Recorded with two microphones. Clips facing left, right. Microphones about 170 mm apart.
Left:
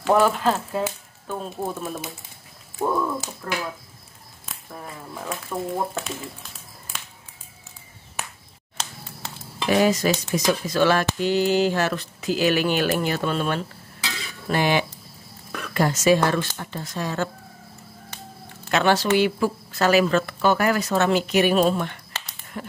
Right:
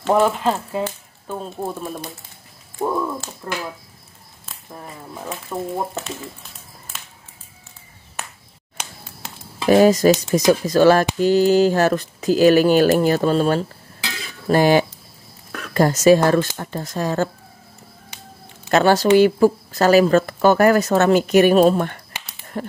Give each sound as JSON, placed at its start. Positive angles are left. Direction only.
{"t": 0.0, "sound": "speech", "side_deg": -5}
{"t": 4.8, "sound": "speech", "side_deg": -10}
{"t": 9.7, "sound": "speech", "side_deg": -40}
{"t": 18.7, "sound": "speech", "side_deg": -40}